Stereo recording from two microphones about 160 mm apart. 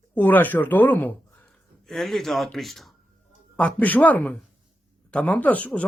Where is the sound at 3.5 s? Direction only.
10° left (ahead or behind).